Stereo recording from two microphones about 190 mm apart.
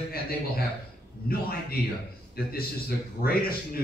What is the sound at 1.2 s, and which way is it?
Speech, 50° left (ahead or behind).